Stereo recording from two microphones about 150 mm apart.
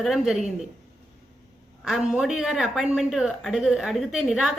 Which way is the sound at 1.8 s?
5° right (ahead or behind).